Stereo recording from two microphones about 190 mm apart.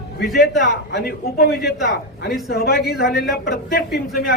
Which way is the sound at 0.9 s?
55° left (ahead or behind).